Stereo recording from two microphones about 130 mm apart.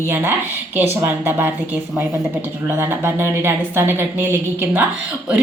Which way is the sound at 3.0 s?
20° right (ahead or behind).